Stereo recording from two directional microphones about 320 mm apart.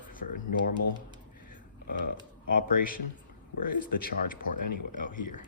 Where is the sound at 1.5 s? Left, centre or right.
Left.